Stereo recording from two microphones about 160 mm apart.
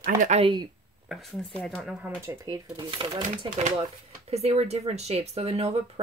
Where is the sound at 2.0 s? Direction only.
15° right (ahead or behind).